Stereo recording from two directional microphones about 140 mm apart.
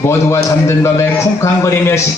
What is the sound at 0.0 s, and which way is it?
A man's voice, 20° left (ahead or behind).